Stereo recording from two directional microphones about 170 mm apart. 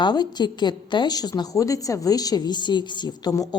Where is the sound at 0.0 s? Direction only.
25° left (ahead or behind).